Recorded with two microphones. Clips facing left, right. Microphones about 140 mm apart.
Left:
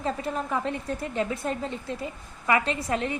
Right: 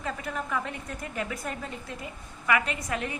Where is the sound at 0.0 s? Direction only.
30° left (ahead or behind).